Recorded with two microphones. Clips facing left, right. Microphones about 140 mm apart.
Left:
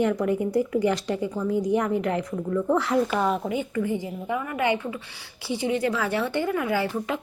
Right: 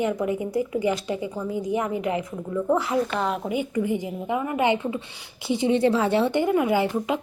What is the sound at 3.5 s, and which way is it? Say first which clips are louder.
A woman's voice: right 1 dB; 15° right (ahead or behind).